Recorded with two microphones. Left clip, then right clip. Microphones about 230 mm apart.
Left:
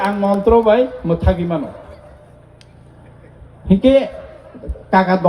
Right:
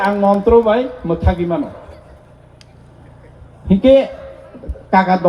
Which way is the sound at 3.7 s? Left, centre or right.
Left.